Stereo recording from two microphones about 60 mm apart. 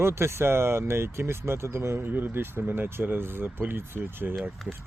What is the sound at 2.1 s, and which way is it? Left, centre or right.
Speech, right.